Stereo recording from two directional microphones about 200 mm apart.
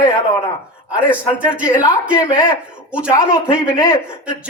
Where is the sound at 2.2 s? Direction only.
20° left (ahead or behind).